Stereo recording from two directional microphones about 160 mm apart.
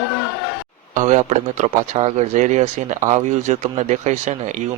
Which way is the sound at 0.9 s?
50° right (ahead or behind).